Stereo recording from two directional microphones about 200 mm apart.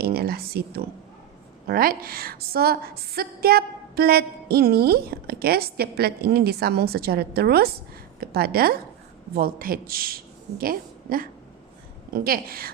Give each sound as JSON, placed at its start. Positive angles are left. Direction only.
{"t": 0.0, "sound": "a woman's voice", "side_deg": -50}